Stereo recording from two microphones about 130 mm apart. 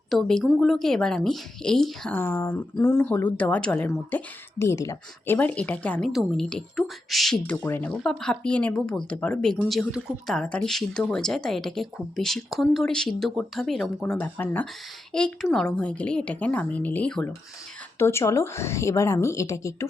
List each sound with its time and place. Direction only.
0.1 s speech: 5° left (ahead or behind)
2.1 s speech: 20° left (ahead or behind)
3.8 s speech: 20° left (ahead or behind); by 7.5 s centre (ahead or behind)
7.6 s speech: 15° left (ahead or behind); by 10.3 s 5° right (ahead or behind)
10.3 s speech: 5° left (ahead or behind)
14.0 s speech: 10° left (ahead or behind)
18.0 s a woman's voice: 20° left (ahead or behind)